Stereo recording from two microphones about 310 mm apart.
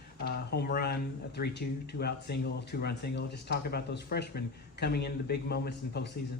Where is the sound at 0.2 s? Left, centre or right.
Left.